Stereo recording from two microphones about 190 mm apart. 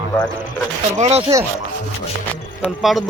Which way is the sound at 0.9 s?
35° right (ahead or behind).